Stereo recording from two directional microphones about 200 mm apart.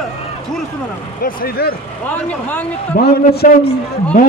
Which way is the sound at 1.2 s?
50° left (ahead or behind).